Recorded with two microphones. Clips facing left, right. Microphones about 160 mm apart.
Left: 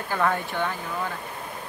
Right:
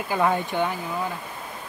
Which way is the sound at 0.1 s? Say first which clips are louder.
Right 2 dB; 15° right (ahead or behind).